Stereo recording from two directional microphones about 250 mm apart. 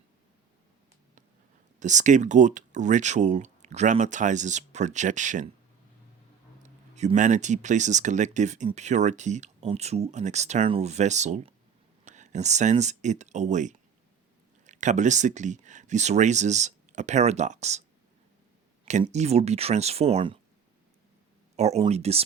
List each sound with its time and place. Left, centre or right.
1.8 s speech: right
6.6 s speech: right
18.9 s speech: right
21.5 s speech: right